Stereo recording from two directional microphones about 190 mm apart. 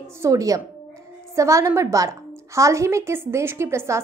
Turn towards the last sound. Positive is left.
turn(degrees=-15)  # may be behind; listen again after turning